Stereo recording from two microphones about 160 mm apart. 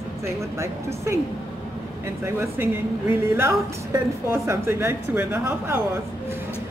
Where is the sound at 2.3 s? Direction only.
15° right (ahead or behind).